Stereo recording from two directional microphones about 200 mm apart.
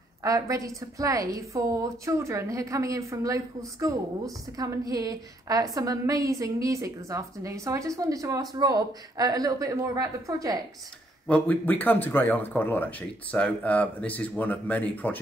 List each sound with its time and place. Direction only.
0.2 s a woman's voice: 15° right (ahead or behind)
11.2 s speech: 5° left (ahead or behind)